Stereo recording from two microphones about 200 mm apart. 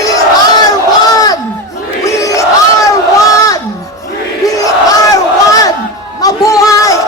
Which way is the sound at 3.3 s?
15° left (ahead or behind).